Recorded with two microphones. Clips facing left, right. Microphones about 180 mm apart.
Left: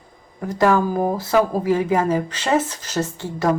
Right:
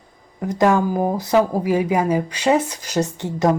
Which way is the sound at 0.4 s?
20° right (ahead or behind).